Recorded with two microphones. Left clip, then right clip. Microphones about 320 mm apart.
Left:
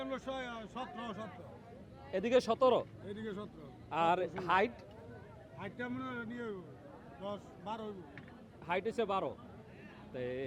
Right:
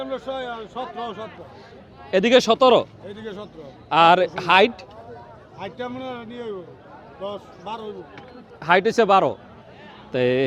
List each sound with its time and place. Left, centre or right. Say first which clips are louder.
0.0 s a man's voice: right 12 dB; left
2.0 s speech: right 15 dB; right
3.2 s a man's voice: right 11 dB; centre
3.8 s a man's voice: right 18 dB; right
5.5 s a man's voice: right 12 dB; centre
8.6 s a man's voice: right 19 dB; right